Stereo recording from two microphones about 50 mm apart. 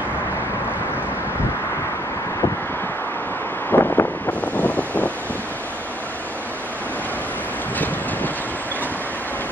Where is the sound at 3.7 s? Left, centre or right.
Left.